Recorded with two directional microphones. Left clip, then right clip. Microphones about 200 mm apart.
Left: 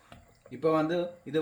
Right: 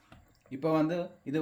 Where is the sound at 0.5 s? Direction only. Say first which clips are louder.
Left 2 dB; 35° right (ahead or behind).